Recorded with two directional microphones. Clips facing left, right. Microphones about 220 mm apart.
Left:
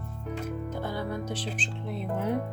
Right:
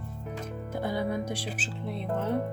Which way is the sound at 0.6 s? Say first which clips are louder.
Right 3 dB; 10° right (ahead or behind).